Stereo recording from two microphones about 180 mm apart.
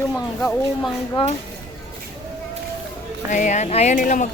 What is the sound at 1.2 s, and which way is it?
Speech, 30° left (ahead or behind).